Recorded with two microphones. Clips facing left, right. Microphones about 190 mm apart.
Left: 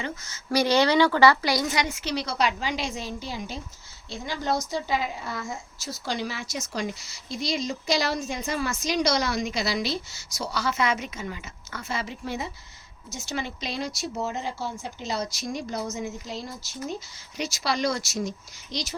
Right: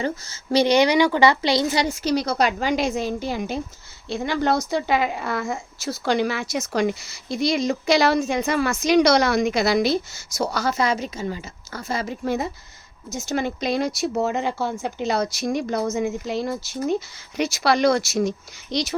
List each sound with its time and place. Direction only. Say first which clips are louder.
0.0 s a woman's voice: right 8 dB; 30° right (ahead or behind); by 18.9 s 65° right (ahead or behind)